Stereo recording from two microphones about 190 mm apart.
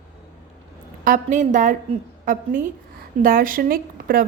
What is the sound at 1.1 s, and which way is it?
A woman's voice, 40° right (ahead or behind).